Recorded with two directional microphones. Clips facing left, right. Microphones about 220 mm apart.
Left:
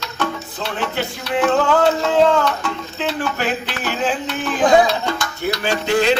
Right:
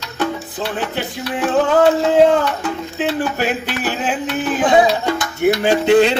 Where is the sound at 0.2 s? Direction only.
15° right (ahead or behind).